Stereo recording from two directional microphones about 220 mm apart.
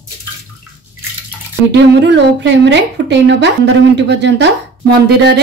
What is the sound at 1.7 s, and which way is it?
Speech, 50° right (ahead or behind).